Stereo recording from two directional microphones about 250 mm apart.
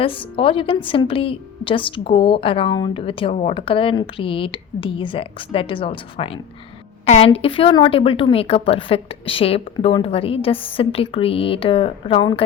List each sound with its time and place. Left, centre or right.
0.0 s a woman's voice: left